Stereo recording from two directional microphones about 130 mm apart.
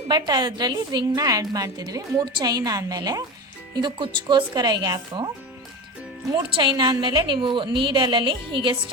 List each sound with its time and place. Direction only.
0.1 s a woman's voice: 35° right (ahead or behind)
6.5 s a woman's voice: 35° right (ahead or behind)